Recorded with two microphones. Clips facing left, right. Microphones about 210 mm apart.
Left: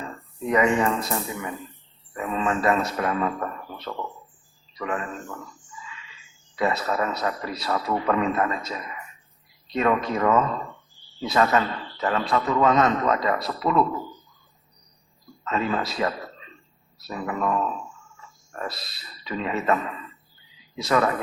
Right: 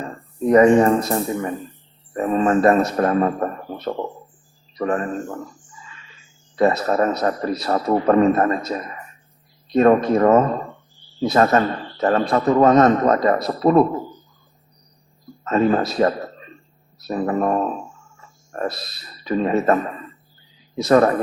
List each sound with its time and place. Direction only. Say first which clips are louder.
0.0 s a man's voice: right 8 dB; 40° right (ahead or behind)
15.4 s a woman's voice: right 8 dB; 45° right (ahead or behind)